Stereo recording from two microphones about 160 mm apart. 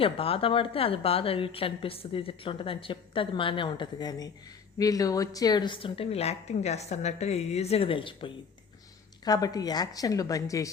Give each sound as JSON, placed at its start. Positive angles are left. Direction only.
{"t": 0.0, "sound": "a woman's voice", "side_deg": 35}